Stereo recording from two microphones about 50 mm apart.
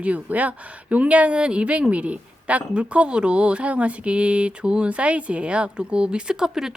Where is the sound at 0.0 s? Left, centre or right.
Right.